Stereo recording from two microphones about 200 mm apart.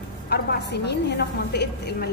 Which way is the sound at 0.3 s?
55° left (ahead or behind).